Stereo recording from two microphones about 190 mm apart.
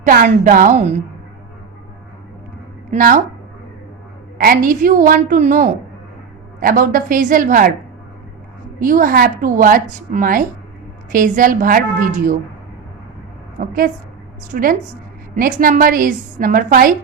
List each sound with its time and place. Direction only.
0.0 s a woman's voice: 45° right (ahead or behind)
2.9 s a woman's voice: 45° right (ahead or behind)
4.4 s a woman's voice: 45° right (ahead or behind)
8.8 s a woman's voice: 45° right (ahead or behind)
13.6 s a woman's voice: 45° right (ahead or behind)